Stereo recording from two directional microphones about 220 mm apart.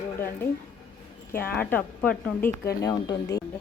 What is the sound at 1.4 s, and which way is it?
A woman's voice, 10° left (ahead or behind).